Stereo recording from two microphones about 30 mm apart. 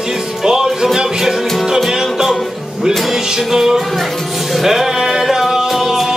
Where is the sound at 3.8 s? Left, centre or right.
Centre.